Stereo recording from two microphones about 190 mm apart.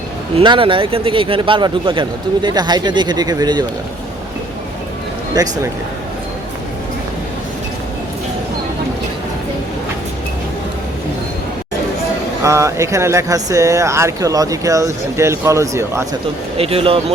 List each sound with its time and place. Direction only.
0.3 s speech: 25° right (ahead or behind)
5.4 s speech: 20° right (ahead or behind)
12.4 s speech: 15° right (ahead or behind)
16.6 s speech: 30° right (ahead or behind)